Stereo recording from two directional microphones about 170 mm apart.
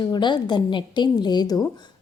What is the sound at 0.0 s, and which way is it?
A woman's voice, 25° left (ahead or behind).